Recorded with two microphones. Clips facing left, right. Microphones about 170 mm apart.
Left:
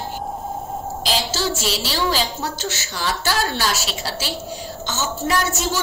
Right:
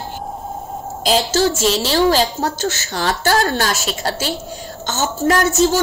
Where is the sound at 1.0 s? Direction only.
50° right (ahead or behind).